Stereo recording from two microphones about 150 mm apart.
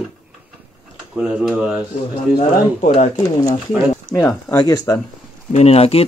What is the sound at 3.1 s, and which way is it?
Speech, 25° left (ahead or behind).